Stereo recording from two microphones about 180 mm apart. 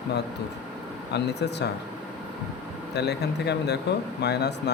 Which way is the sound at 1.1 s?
70° left (ahead or behind).